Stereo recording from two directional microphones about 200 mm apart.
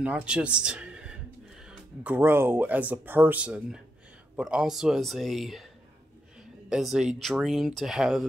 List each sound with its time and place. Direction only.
0.0 s speech: 5° right (ahead or behind)
6.7 s speech: centre (ahead or behind)